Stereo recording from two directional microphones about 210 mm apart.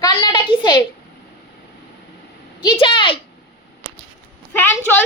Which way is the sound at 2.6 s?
20° left (ahead or behind).